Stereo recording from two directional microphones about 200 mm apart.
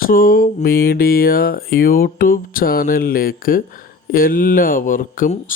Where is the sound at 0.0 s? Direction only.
45° left (ahead or behind).